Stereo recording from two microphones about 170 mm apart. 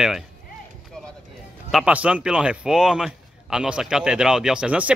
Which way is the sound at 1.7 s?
5° right (ahead or behind).